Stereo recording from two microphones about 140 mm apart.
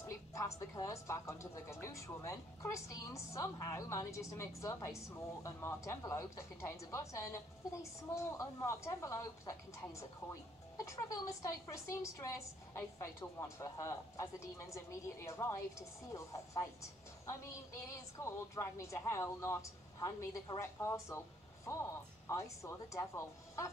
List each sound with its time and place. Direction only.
0.0 s speech: 20° left (ahead or behind)